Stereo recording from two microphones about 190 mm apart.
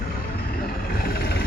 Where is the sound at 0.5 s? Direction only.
50° left (ahead or behind).